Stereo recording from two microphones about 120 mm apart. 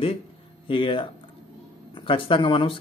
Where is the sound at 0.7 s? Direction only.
45° left (ahead or behind).